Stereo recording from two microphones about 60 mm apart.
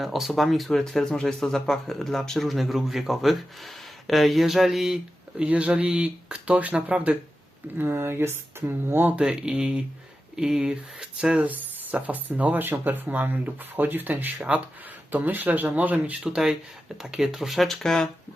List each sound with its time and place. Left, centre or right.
0.0 s speech: centre
5.4 s speech: right
7.8 s speech: right
9.1 s speech: centre
11.4 s speech: right
14.5 s speech: right
15.1 s speech: right
16.3 s speech: centre